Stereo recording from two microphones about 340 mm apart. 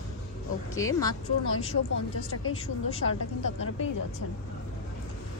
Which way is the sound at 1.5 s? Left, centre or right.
Left.